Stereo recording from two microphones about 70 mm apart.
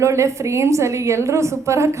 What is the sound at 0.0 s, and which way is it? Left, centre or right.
A woman's voice, right.